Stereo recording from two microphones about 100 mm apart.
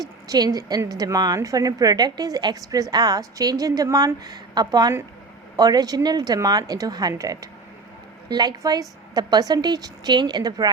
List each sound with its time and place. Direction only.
0.3 s a woman's voice: 40° right (ahead or behind)